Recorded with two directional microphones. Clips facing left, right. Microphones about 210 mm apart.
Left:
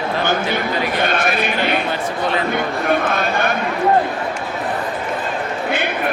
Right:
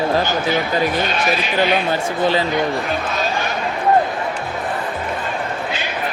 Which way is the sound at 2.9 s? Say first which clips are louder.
Left 4 dB; 55° left (ahead or behind).